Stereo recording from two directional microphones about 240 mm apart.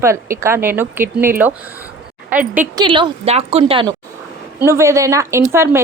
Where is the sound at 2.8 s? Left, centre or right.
Centre.